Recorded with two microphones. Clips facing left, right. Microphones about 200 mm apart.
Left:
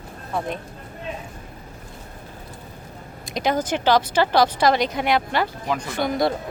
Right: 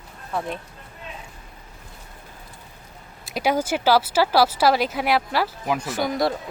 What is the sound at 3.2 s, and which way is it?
Speech, 10° right (ahead or behind).